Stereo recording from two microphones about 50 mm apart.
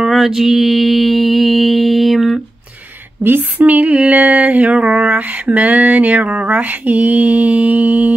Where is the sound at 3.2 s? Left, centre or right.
Right.